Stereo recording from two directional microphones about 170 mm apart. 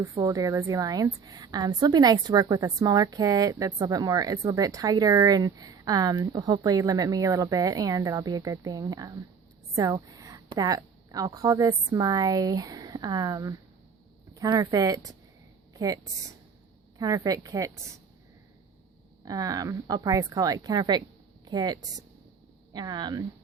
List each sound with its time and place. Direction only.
0.0 s a woman's voice: 20° right (ahead or behind)
15.7 s a sound: 20° right (ahead or behind)
17.0 s a woman's voice: 20° right (ahead or behind)
19.2 s a woman's voice: 20° right (ahead or behind)